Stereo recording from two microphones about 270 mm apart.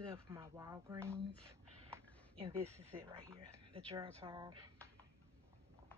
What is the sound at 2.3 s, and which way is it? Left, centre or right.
Speech, centre.